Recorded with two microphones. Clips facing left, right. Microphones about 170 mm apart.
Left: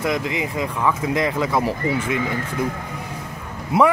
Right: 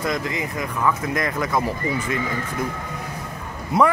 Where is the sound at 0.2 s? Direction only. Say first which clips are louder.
Left 3 dB; 20° left (ahead or behind).